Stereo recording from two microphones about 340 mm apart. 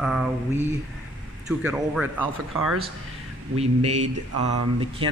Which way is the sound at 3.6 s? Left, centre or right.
Centre.